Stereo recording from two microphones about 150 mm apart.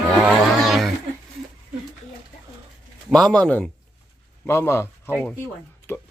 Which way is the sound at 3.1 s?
5° left (ahead or behind).